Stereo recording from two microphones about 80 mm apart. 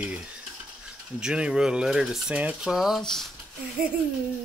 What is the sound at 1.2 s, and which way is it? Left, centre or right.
Speech, centre.